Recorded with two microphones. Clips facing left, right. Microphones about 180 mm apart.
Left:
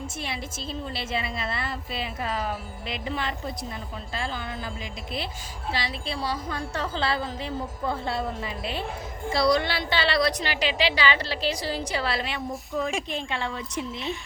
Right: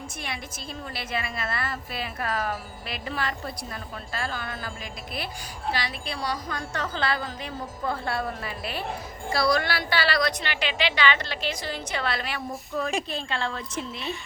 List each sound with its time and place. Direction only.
0.2 s a woman's voice: 25° left (ahead or behind)
13.1 s a woman's voice: 15° left (ahead or behind)